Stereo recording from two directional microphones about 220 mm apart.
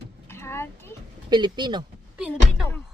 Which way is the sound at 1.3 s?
20° right (ahead or behind).